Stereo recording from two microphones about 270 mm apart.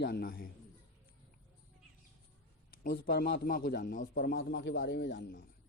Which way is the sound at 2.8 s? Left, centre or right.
Left.